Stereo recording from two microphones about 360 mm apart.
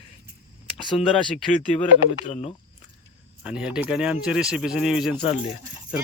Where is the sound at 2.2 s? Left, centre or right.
Centre.